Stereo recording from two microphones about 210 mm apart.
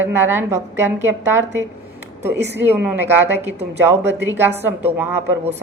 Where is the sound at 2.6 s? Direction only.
10° right (ahead or behind).